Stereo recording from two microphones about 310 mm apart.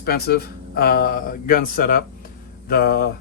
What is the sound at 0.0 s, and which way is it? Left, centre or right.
Speech, left.